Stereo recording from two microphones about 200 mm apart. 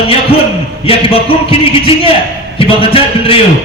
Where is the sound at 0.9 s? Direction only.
30° left (ahead or behind).